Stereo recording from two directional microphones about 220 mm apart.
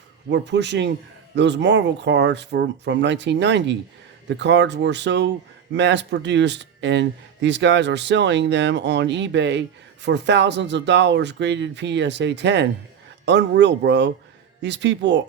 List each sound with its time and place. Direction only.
0.3 s speech: 50° right (ahead or behind)